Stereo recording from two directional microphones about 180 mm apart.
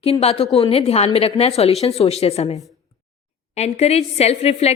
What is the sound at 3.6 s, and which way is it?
A woman's voice, 35° left (ahead or behind).